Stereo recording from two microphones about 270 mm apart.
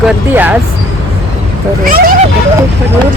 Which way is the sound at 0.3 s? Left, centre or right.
Centre.